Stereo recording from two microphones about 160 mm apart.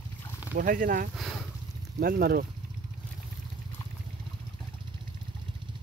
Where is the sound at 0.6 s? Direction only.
60° right (ahead or behind).